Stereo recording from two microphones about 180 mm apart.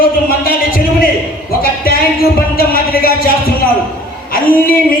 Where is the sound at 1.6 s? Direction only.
55° left (ahead or behind).